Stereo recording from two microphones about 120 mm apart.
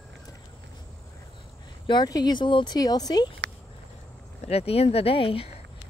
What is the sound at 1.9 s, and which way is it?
Speech, 35° left (ahead or behind).